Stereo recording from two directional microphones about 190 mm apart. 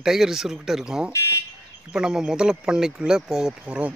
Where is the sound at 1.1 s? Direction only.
15° left (ahead or behind).